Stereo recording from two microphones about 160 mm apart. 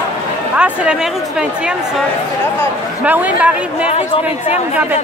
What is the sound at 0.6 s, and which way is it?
A woman's voice, 5° right (ahead or behind).